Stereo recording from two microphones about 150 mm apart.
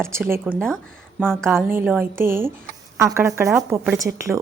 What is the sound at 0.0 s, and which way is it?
A woman's voice, 15° right (ahead or behind).